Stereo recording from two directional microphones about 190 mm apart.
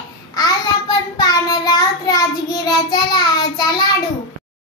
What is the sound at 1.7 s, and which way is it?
Child singing, 20° left (ahead or behind).